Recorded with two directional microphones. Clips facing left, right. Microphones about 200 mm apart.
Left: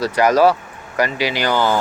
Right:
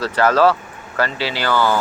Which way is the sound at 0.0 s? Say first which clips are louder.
Left 1 dB; 15° left (ahead or behind).